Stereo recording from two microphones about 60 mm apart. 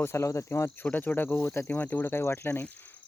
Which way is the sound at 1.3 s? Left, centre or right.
Left.